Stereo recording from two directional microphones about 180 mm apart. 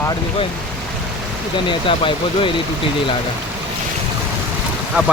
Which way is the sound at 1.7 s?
30° left (ahead or behind).